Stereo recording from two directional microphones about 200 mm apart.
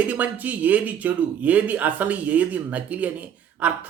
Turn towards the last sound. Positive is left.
turn(degrees=-5)  # may be behind; listen again after turning